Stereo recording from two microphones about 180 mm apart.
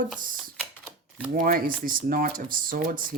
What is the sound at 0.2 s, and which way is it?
Typing, 50° right (ahead or behind).